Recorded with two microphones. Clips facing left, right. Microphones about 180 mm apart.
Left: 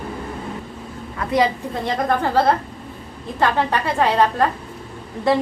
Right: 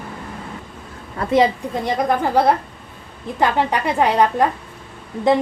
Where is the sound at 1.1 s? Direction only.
25° right (ahead or behind).